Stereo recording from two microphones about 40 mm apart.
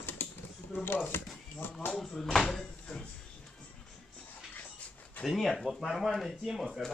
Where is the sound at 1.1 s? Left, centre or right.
Left.